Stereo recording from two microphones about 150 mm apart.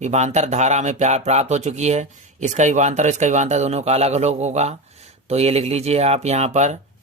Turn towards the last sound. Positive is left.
turn(degrees=-50)  # may be behind; listen again after turning